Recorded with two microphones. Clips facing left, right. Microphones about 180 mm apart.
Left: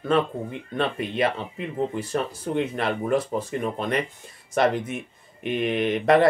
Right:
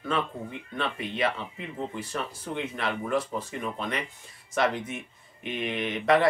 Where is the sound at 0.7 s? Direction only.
45° left (ahead or behind).